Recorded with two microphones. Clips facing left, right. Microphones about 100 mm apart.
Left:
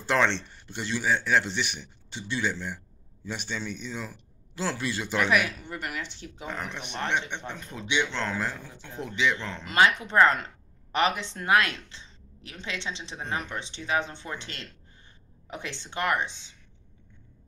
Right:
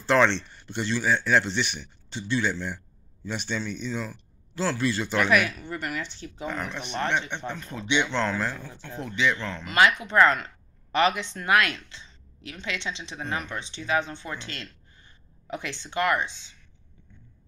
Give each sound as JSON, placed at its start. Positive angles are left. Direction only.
{"t": 0.0, "sound": "speech", "side_deg": 5}
{"t": 8.0, "sound": "speech", "side_deg": 0}
{"t": 8.4, "sound": "a woman's voice", "side_deg": 15}